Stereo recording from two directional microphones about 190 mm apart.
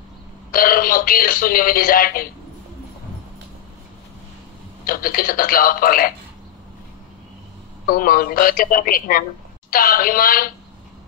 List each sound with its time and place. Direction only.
0.5 s speech: 50° left (ahead or behind)
4.8 s speech: 50° left (ahead or behind)
7.8 s speech: 50° left (ahead or behind)